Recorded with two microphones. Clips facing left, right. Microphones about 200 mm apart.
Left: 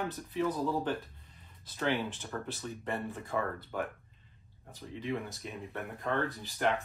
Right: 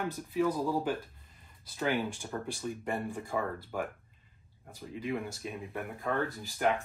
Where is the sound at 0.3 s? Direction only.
10° right (ahead or behind).